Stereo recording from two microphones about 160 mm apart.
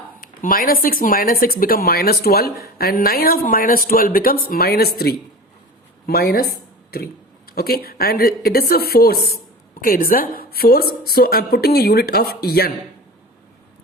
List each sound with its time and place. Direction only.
0.2 s a woman's voice: 60° left (ahead or behind)
9.8 s a woman's voice: 65° left (ahead or behind)